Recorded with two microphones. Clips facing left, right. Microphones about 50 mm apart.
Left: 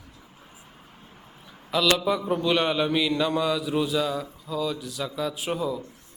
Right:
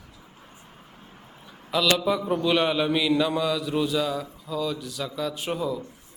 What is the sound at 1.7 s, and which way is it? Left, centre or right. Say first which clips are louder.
A man's voice: even; centre.